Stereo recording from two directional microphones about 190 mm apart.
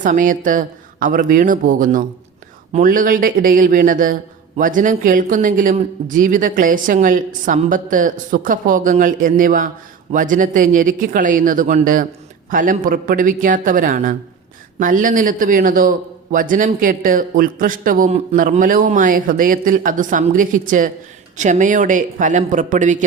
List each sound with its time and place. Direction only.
0.0 s a man's voice: 45° right (ahead or behind)